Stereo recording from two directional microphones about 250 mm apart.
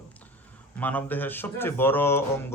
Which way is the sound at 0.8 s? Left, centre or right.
Centre.